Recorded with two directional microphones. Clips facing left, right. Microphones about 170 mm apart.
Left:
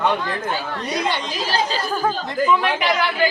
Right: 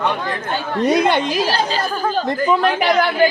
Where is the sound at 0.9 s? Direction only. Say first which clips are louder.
Right 8 dB; 55° right (ahead or behind).